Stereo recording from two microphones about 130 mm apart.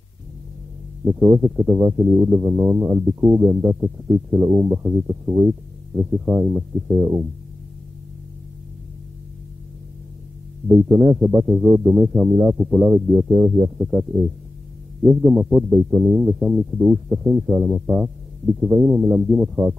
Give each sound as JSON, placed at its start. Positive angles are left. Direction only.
{"t": 1.0, "sound": "speech", "side_deg": -5}
{"t": 1.4, "sound": "speech", "side_deg": -20}
{"t": 10.7, "sound": "speech", "side_deg": -15}
{"t": 12.3, "sound": "speech", "side_deg": -25}
{"t": 12.5, "sound": "speech", "side_deg": -15}
{"t": 15.0, "sound": "speech", "side_deg": -15}
{"t": 16.3, "sound": "speech", "side_deg": -5}